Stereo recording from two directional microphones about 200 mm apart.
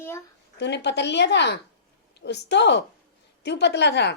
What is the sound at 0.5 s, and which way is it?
A woman's voice, 55° left (ahead or behind).